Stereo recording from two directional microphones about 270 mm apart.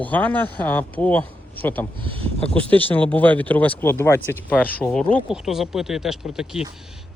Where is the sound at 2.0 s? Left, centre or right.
Centre.